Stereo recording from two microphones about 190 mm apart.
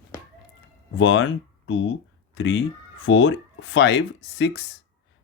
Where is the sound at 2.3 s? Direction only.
75° left (ahead or behind).